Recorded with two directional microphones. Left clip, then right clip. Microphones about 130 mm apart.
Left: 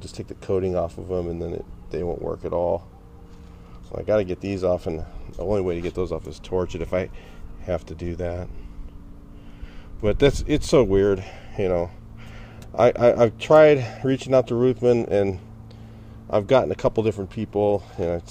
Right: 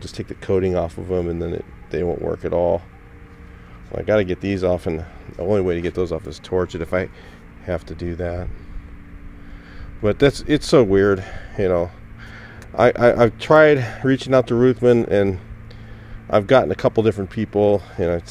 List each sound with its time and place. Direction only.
0.0 s speech: 30° right (ahead or behind)
3.9 s speech: 30° right (ahead or behind); by 8.5 s 10° right (ahead or behind)
10.0 s speech: 10° right (ahead or behind)